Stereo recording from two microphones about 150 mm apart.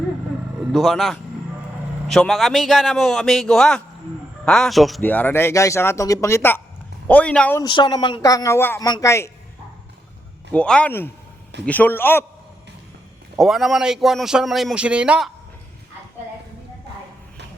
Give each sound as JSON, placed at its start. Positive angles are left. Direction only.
{"t": 0.7, "sound": "speech", "side_deg": 0}
{"t": 5.0, "sound": "speech", "side_deg": 10}
{"t": 7.6, "sound": "speech", "side_deg": 30}
{"t": 10.5, "sound": "speech", "side_deg": 10}
{"t": 13.3, "sound": "speech", "side_deg": 0}